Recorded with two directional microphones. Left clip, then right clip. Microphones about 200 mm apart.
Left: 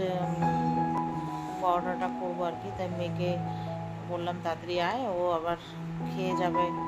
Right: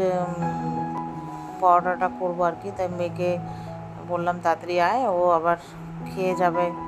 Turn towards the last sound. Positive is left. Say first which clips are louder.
# right 6 dB
turn(degrees=-30)  # may be behind; listen again after turning